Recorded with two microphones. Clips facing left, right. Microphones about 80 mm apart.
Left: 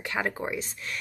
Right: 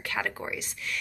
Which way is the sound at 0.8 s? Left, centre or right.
Left.